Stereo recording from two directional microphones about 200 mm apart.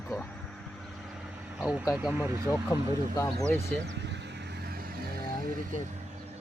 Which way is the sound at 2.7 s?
15° left (ahead or behind).